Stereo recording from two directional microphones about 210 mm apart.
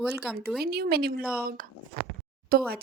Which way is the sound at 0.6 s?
50° right (ahead or behind).